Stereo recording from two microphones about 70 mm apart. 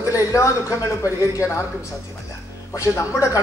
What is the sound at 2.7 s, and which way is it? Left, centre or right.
Speech, left.